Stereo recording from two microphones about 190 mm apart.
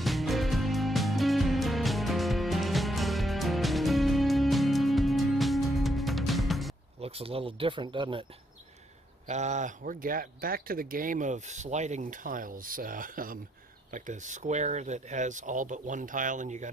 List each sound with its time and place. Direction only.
0.0 s music: centre (ahead or behind)
7.0 s speech: 30° right (ahead or behind)
9.3 s speech: 35° right (ahead or behind)